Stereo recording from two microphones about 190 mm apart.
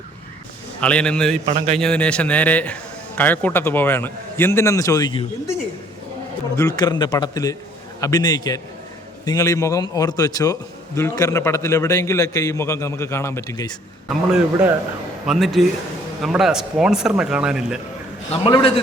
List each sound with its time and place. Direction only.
0.8 s speech: 5° left (ahead or behind)
1.5 s a man's voice: 35° right (ahead or behind)
1.7 s a man's voice: 5° left (ahead or behind); by 5.2 s 20° left (ahead or behind)
6.6 s a man's voice: 20° left (ahead or behind)
14.1 s speech: 5° right (ahead or behind)
18.3 s a man's voice: 30° left (ahead or behind)